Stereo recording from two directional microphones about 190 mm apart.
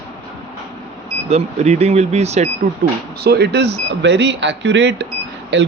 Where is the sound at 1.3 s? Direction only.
35° right (ahead or behind).